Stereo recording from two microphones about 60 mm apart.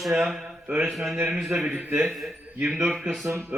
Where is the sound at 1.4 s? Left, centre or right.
Centre.